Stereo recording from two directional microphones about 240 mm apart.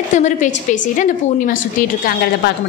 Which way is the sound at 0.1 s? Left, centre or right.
Left.